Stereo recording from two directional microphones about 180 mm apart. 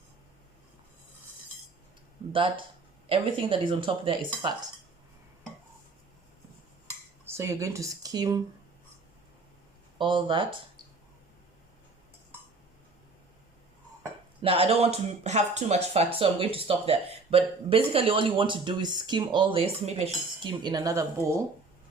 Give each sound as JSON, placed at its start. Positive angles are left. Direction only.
{"t": 3.1, "sound": "speech", "side_deg": -30}
{"t": 7.3, "sound": "speech", "side_deg": -15}
{"t": 10.0, "sound": "speech", "side_deg": -25}
{"t": 14.4, "sound": "speech", "side_deg": -30}
{"t": 20.4, "sound": "speech", "side_deg": -25}